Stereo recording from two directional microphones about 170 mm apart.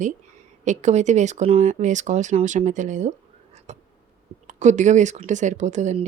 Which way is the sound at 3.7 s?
40° right (ahead or behind).